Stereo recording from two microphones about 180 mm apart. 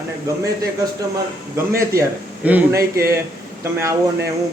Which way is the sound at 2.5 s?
10° right (ahead or behind).